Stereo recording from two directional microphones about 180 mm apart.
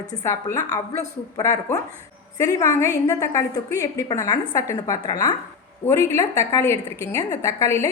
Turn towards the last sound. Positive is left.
turn(degrees=15)  # may be behind; listen again after turning